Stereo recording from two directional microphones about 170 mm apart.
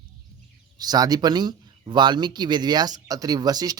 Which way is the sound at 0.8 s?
25° right (ahead or behind).